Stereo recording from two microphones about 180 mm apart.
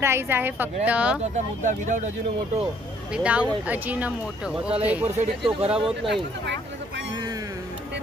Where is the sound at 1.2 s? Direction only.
40° right (ahead or behind).